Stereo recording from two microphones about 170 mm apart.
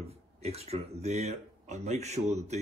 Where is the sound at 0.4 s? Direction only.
35° right (ahead or behind).